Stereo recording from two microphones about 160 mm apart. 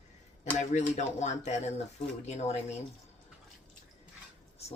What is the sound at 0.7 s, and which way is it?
Speech, 45° left (ahead or behind).